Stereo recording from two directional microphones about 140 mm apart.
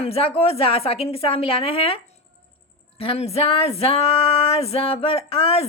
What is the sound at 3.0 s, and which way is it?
A woman's voice, 45° left (ahead or behind).